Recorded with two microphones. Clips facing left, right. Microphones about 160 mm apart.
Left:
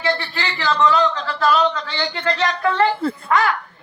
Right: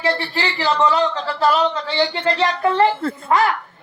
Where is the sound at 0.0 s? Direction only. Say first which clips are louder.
Right 2 dB; 30° right (ahead or behind).